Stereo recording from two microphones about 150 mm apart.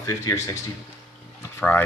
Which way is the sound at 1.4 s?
15° left (ahead or behind).